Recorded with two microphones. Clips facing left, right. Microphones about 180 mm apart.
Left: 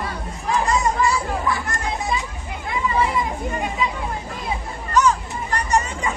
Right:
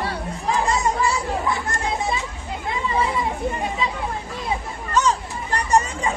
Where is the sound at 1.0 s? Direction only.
25° right (ahead or behind).